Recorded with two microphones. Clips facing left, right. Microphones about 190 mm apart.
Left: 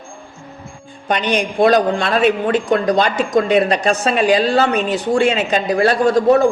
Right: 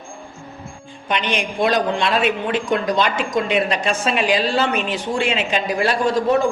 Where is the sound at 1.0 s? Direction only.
40° left (ahead or behind).